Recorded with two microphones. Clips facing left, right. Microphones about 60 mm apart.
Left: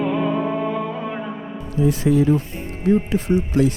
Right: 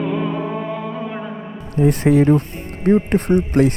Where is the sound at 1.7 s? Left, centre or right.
Right.